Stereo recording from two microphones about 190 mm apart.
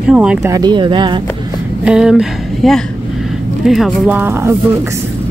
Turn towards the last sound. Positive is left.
turn(degrees=-10)  # may be behind; listen again after turning